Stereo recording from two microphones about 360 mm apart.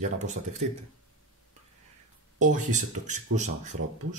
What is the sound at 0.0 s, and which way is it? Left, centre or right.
Speech, centre.